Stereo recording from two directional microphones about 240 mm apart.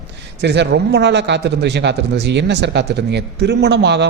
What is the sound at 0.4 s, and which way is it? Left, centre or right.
A man's voice, right.